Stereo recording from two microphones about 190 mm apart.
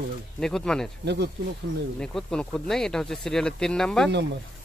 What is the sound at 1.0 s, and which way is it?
Speech, 60° right (ahead or behind).